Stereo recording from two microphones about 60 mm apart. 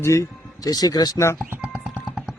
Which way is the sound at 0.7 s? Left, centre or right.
Left.